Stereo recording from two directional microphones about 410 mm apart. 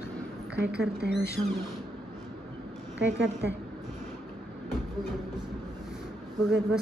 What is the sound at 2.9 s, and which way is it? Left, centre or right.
Speech, right.